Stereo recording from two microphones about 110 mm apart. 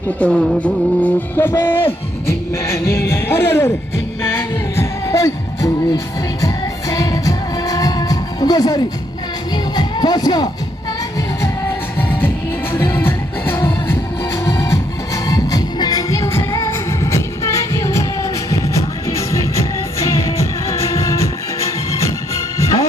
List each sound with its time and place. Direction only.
0.2 s music: 5° left (ahead or behind); by 3.7 s 20° left (ahead or behind)
4.8 s music: 25° left (ahead or behind)
9.7 s speech: 40° left (ahead or behind)
12.8 s music: 20° left (ahead or behind)
14.4 s music: 30° left (ahead or behind)